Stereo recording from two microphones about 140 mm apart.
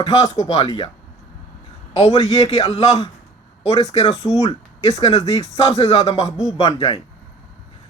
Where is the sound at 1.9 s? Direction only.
45° left (ahead or behind).